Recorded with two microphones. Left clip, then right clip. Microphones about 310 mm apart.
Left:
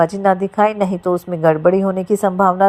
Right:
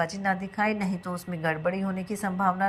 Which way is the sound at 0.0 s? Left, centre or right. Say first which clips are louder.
Left 13 dB; left.